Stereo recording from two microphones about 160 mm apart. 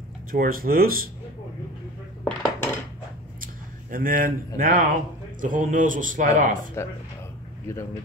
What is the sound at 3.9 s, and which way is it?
Speech, 60° right (ahead or behind).